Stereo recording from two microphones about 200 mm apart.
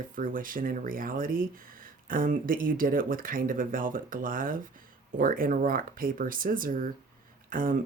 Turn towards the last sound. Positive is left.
turn(degrees=-45)  # may be behind; listen again after turning